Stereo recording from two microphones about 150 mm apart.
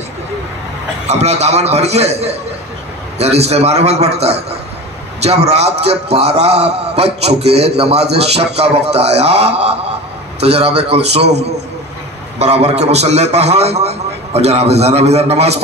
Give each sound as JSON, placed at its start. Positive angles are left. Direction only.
{"t": 1.0, "sound": "a man's voice", "side_deg": -45}
{"t": 12.4, "sound": "a man's voice", "side_deg": -45}